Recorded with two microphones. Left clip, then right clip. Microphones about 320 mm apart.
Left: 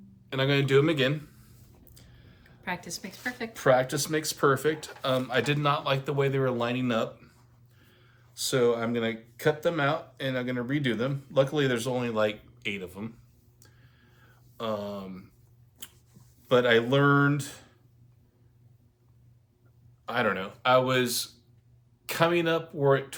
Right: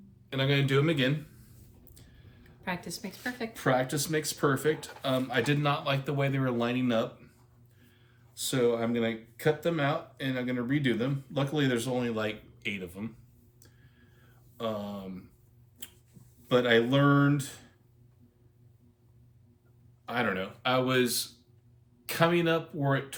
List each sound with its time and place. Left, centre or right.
0.3 s speech: centre
2.0 s a sound: centre
2.6 s a woman's voice: centre
3.5 s speech: centre
8.4 s speech: centre
14.2 s a sound: centre
16.5 s speech: centre
20.1 s speech: centre